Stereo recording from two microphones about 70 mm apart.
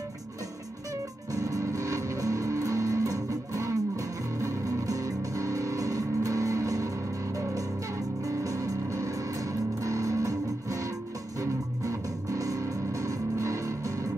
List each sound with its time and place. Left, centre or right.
1.3 s music: right
8.3 s music: right